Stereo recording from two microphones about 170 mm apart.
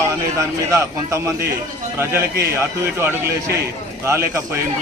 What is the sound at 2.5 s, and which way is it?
Speech, 15° right (ahead or behind).